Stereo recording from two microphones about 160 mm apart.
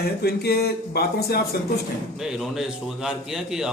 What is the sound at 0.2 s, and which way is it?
Speech, 80° left.